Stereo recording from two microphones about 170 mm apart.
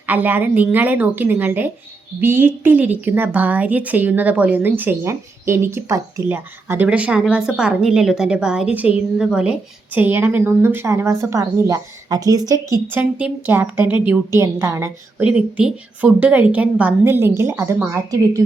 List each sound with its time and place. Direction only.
0.0 s a woman's voice: 10° right (ahead or behind)
15.2 s a woman's voice: 5° right (ahead or behind)